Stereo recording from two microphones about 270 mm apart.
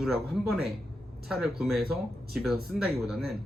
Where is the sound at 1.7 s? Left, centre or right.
Right.